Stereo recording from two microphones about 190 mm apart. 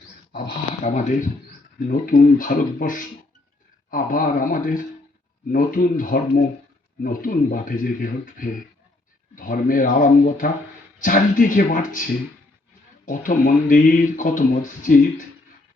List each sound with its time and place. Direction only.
0.9 s speech: 40° left (ahead or behind)